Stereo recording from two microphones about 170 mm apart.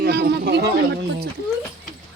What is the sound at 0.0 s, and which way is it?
Speech, 75° right (ahead or behind).